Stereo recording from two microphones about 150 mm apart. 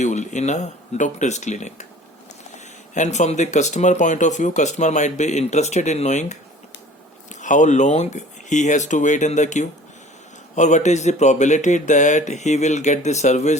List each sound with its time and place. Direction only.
0.0 s speech: 50° left (ahead or behind)
2.9 s speech: 50° left (ahead or behind)